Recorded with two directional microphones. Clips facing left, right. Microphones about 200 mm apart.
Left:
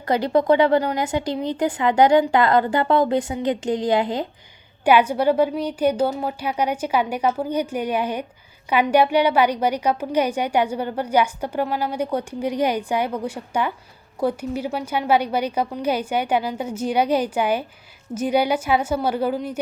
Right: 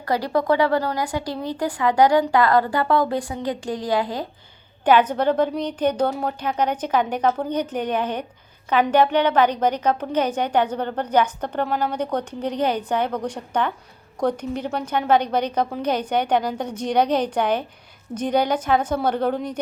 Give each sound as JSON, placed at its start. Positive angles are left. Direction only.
{"t": 0.0, "sound": "speech", "side_deg": 20}
{"t": 4.9, "sound": "a woman's voice", "side_deg": 10}